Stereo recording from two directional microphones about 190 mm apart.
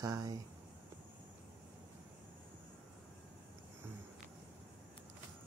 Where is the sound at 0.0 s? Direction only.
20° right (ahead or behind).